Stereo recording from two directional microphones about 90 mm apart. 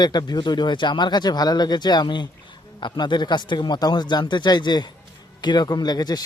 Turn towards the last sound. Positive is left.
turn(degrees=50)  # may be behind; listen again after turning